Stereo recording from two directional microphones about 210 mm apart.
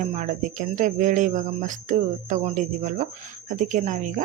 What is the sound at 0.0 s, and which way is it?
Speech, 35° right (ahead or behind).